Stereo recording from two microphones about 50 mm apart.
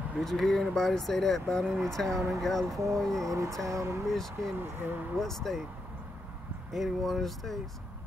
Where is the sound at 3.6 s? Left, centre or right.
Right.